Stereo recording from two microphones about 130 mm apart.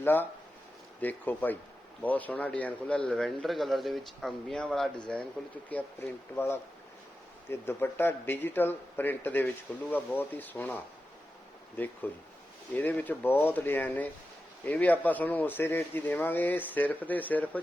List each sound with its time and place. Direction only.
0.0 s speech: 15° left (ahead or behind)
12.0 s speech: 15° left (ahead or behind)